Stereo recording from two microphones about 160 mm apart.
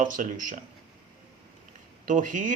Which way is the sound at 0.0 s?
55° right (ahead or behind).